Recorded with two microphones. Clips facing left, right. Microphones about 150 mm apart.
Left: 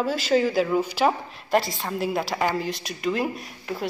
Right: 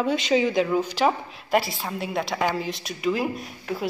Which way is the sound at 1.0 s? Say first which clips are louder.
Even; 5° right (ahead or behind).